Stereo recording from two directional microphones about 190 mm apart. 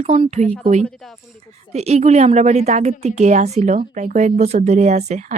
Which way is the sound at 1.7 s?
35° right (ahead or behind).